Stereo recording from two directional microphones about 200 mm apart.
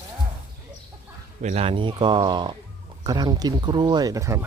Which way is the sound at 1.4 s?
35° right (ahead or behind).